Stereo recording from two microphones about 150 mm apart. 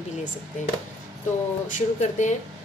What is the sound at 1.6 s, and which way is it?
Speech, 55° left (ahead or behind).